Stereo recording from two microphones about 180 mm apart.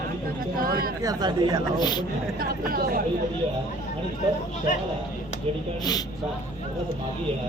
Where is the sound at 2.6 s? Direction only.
55° right (ahead or behind).